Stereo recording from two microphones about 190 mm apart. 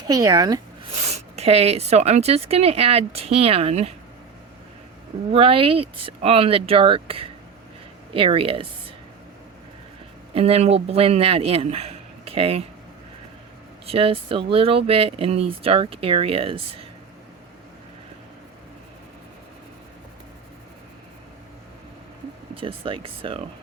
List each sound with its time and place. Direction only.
0.1 s speech: 20° right (ahead or behind)
1.0 s speech: 35° right (ahead or behind)
5.3 s speech: 30° right (ahead or behind)
10.3 s speech: 30° right (ahead or behind)
13.8 s speech: 30° right (ahead or behind)
22.5 s speech: 25° right (ahead or behind)